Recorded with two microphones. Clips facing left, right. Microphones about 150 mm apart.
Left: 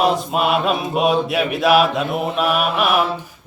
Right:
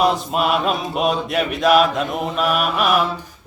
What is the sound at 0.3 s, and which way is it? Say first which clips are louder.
Mantra: left 1 dB; centre (ahead or behind).